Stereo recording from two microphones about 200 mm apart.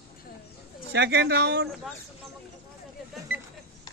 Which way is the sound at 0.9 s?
60° right (ahead or behind).